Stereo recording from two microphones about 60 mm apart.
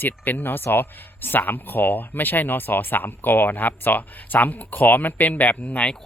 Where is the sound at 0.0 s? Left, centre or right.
Left.